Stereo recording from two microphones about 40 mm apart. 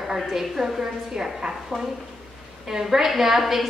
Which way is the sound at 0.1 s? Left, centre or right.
Centre.